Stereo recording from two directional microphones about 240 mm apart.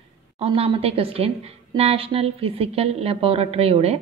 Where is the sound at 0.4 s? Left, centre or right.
Right.